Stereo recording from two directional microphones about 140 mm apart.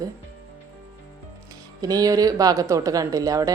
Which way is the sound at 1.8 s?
25° right (ahead or behind).